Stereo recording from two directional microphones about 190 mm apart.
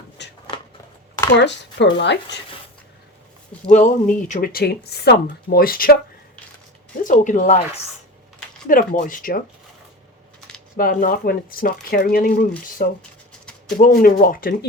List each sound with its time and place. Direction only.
0.2 s shuffling cards: 65° left (ahead or behind)
1.4 s speech: 65° left (ahead or behind)
3.7 s speech: 40° left (ahead or behind)
7.0 s speech: 40° left (ahead or behind)
8.6 s speech: 45° left (ahead or behind)
10.8 s speech: 50° left (ahead or behind)